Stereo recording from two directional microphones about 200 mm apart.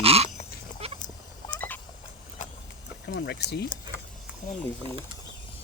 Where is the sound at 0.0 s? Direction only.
30° right (ahead or behind).